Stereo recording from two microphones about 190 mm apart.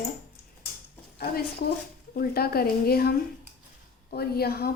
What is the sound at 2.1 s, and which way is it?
A woman's voice, 55° left (ahead or behind).